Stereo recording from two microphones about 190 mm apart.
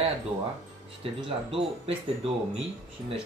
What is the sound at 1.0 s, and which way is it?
Speech, 30° right (ahead or behind).